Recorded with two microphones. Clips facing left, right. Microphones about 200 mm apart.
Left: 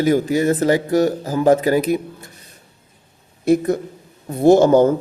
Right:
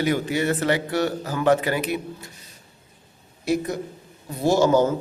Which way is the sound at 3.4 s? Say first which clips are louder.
Left 8 dB; 55° left (ahead or behind).